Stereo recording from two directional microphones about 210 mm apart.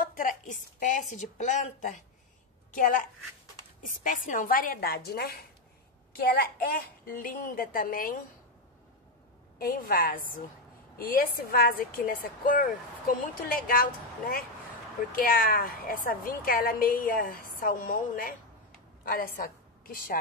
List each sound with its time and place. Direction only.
0.0 s a woman's voice: 40° left (ahead or behind)
9.6 s a woman's voice: 45° left (ahead or behind)